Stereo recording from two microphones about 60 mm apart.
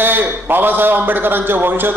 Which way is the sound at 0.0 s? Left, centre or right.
Right.